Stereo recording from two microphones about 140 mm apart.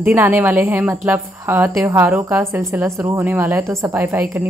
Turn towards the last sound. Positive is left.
turn(degrees=-20)  # may be behind; listen again after turning